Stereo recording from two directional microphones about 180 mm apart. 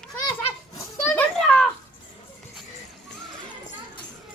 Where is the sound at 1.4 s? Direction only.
Centre (ahead or behind).